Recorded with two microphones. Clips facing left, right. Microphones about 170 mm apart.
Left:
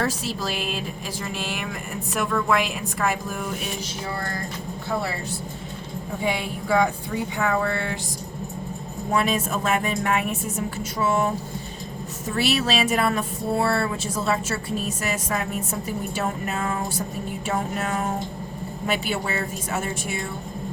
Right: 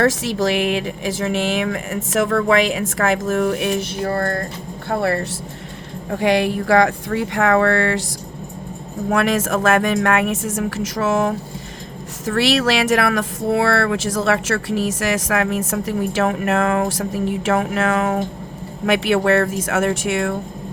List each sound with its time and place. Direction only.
0.0 s speech: 75° right (ahead or behind)
6.1 s speech: 80° right
9.0 s speech: 80° right
18.9 s speech: 85° right